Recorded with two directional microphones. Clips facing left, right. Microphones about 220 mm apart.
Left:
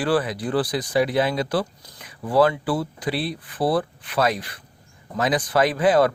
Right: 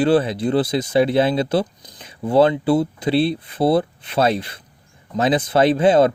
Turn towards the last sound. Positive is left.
turn(degrees=-25)  # may be behind; listen again after turning